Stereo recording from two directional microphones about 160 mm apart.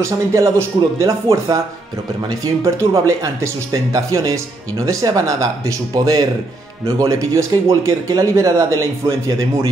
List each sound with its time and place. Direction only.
0.0 s speech: 20° right (ahead or behind)